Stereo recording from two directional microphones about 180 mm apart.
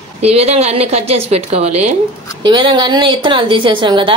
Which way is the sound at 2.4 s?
25° right (ahead or behind).